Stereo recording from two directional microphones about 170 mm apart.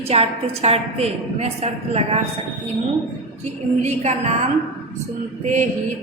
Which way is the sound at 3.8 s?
40° right (ahead or behind).